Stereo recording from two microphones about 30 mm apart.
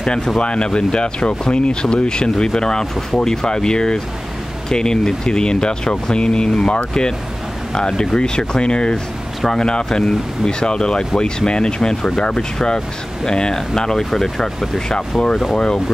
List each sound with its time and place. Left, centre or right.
0.0 s speech: left